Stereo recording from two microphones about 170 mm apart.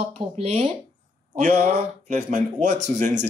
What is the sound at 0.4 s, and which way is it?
Speech, 35° right (ahead or behind).